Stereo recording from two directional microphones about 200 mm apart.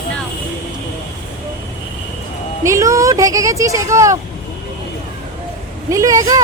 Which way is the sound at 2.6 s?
15° right (ahead or behind).